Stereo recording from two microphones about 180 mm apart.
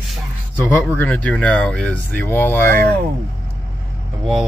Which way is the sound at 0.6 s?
10° left (ahead or behind).